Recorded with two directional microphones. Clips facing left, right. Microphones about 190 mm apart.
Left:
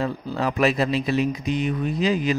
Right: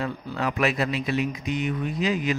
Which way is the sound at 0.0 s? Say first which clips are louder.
Left 3 dB; 35° left (ahead or behind).